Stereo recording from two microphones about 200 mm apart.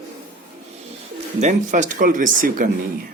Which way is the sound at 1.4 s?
40° right (ahead or behind).